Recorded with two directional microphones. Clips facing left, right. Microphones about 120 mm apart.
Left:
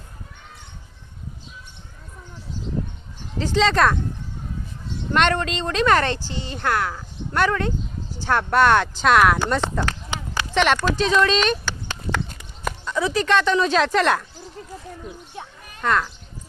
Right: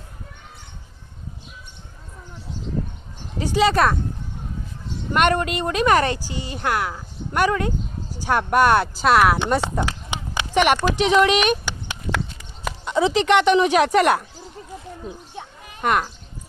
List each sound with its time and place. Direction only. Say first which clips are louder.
3.3 s a woman's voice: right 1 dB; 10° right (ahead or behind)
5.1 s a woman's voice: right 1 dB; 10° right (ahead or behind)
9.4 s clip-clop: right 1 dB; 15° right (ahead or behind)
10.8 s a woman's voice: right 2 dB; 15° right (ahead or behind)
15.0 s a sound: right 1 dB; 25° right (ahead or behind)